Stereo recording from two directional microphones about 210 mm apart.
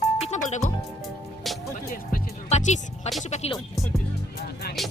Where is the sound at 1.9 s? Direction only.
35° left (ahead or behind).